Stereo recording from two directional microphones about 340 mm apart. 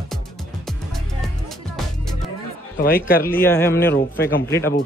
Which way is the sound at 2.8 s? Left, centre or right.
Left.